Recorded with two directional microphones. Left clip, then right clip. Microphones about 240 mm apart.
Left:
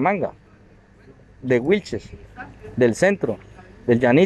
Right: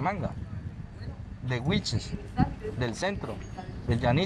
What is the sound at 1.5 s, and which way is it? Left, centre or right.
Speech, left.